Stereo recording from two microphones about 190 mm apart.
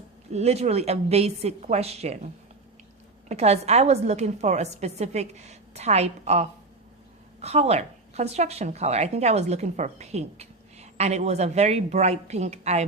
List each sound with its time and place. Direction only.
0.3 s speech: 35° right (ahead or behind)